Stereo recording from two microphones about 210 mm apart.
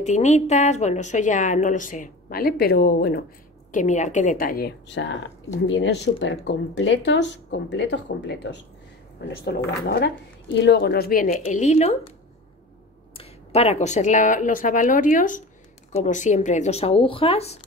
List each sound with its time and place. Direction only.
0.0 s a woman's voice: 35° left (ahead or behind)
3.7 s a woman's voice: 35° left (ahead or behind)
13.2 s a woman's voice: 30° left (ahead or behind)